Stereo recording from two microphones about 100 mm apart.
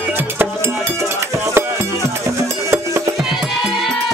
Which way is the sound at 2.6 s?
30° right (ahead or behind).